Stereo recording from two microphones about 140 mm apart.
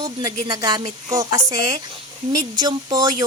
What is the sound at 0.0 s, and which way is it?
Speech, 25° right (ahead or behind).